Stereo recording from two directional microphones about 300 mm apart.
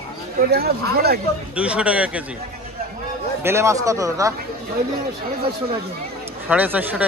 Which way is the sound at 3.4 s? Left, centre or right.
Centre.